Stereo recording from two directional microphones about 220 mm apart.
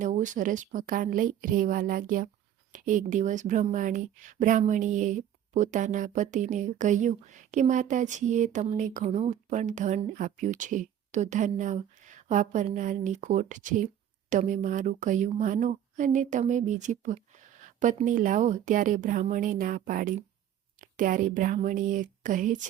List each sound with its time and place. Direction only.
0.0 s speech: 35° right (ahead or behind)